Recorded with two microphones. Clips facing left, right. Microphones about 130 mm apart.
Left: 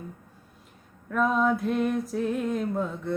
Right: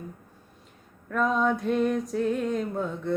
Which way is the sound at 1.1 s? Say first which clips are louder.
Left 1 dB; 5° left (ahead or behind).